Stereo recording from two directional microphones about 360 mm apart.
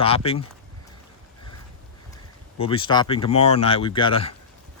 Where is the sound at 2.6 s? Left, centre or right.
Centre.